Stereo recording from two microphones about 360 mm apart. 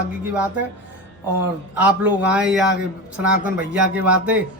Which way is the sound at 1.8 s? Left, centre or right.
Centre.